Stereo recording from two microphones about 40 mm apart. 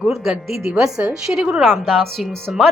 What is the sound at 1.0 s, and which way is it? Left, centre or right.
Speech, right.